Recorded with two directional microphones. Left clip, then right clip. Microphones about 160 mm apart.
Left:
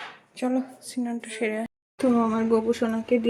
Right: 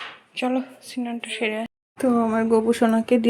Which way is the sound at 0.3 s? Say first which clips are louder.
Right 3 dB; 5° left (ahead or behind).